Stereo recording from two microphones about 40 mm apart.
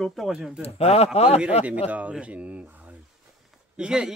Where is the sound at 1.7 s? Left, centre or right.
Right.